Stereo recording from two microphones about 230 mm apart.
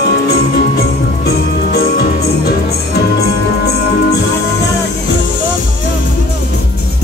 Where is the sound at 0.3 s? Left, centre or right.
Left.